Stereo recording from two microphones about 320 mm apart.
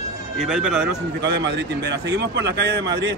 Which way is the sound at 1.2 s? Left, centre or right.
Right.